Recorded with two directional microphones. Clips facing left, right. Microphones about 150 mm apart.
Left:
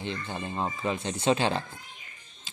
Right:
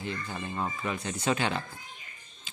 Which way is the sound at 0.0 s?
25° left (ahead or behind).